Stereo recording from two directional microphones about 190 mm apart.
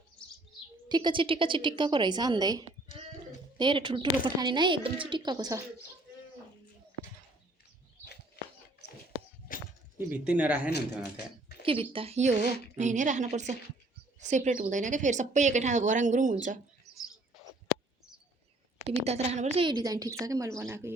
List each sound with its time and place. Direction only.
0.9 s speech: 25° right (ahead or behind)
9.5 s a sound: 45° left (ahead or behind)
10.1 s speech: 10° right (ahead or behind)
11.6 s a woman's voice: 30° right (ahead or behind)
18.9 s speech: 35° right (ahead or behind); by 20.9 s 15° right (ahead or behind)